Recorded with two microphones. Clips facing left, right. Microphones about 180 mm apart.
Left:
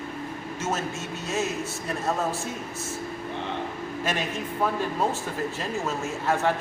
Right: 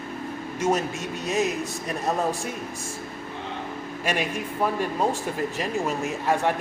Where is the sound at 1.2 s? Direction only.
15° right (ahead or behind).